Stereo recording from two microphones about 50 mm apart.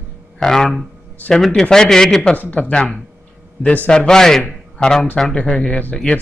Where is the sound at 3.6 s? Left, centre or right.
Left.